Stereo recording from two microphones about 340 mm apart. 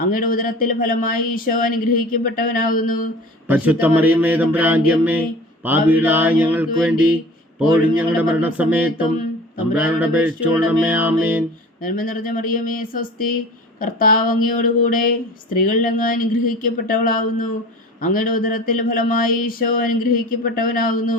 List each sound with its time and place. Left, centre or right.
0.1 s speech: left
3.4 s music: centre
11.8 s speech: left